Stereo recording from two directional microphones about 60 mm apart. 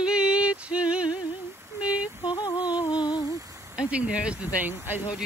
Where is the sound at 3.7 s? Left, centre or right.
Right.